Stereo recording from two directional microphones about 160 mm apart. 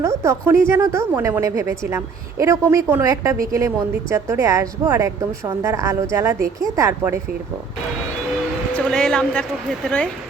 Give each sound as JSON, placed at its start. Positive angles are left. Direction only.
{"t": 0.0, "sound": "speech", "side_deg": -20}
{"t": 8.7, "sound": "speech", "side_deg": 5}